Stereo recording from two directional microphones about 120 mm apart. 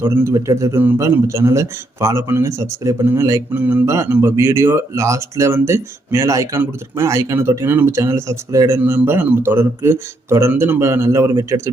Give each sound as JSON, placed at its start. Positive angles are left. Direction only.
{"t": 0.0, "sound": "speech", "side_deg": -20}
{"t": 3.6, "sound": "speech", "side_deg": -15}